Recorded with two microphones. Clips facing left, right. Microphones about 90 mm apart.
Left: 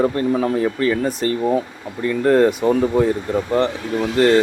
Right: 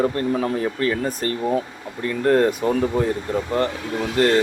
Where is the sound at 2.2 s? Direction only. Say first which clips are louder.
Left 3 dB; 20° left (ahead or behind).